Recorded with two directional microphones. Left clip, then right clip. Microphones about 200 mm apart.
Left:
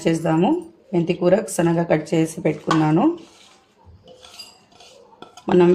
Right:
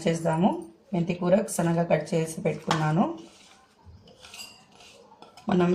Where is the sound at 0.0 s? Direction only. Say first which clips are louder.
Left 6 dB; 50° left (ahead or behind).